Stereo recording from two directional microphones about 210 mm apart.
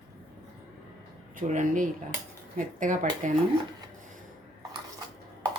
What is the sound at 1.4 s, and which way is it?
A woman's voice, 35° right (ahead or behind).